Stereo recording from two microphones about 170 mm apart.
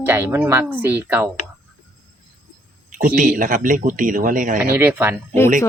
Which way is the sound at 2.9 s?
50° right (ahead or behind).